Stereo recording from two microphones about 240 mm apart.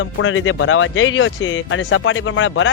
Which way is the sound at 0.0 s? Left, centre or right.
Left.